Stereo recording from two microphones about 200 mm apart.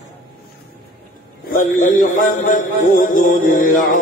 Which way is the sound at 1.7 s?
40° left (ahead or behind).